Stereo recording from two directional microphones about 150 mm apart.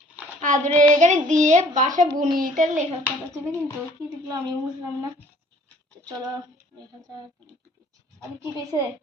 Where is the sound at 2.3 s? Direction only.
65° right (ahead or behind).